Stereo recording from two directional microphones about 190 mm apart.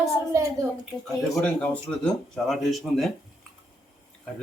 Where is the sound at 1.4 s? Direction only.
5° left (ahead or behind).